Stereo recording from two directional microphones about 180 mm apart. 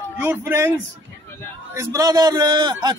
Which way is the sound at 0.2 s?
10° right (ahead or behind).